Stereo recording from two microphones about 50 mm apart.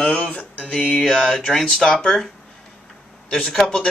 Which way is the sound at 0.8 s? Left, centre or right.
Centre.